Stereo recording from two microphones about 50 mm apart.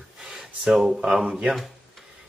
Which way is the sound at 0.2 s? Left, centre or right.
Centre.